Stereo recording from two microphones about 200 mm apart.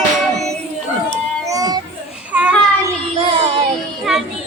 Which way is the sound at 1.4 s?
20° right (ahead or behind).